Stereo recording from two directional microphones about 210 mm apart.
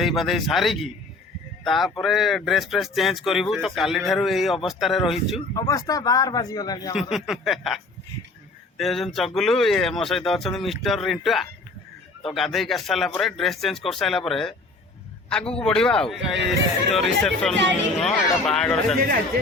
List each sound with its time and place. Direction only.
0.0 s speech: centre (ahead or behind)
5.5 s speech: 15° left (ahead or behind)
7.1 s speech: centre (ahead or behind)
8.8 s a man's voice: centre (ahead or behind)